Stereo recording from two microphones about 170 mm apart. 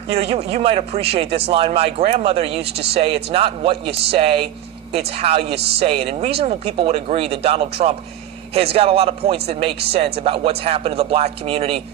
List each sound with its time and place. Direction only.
0.1 s speech: 35° right (ahead or behind)